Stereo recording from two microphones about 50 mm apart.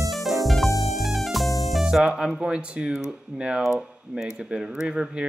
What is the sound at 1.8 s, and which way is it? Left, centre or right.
Speech, centre.